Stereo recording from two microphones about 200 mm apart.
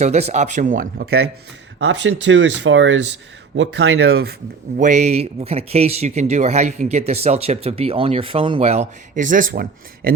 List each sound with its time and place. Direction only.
0.0 s speech: 35° right (ahead or behind); by 1.3 s 50° right (ahead or behind)
1.8 s speech: 60° right (ahead or behind)
4.8 s speech: 35° right (ahead or behind)